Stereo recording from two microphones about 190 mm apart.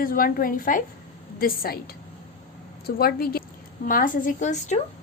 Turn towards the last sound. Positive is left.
turn(degrees=40)  # may be behind; listen again after turning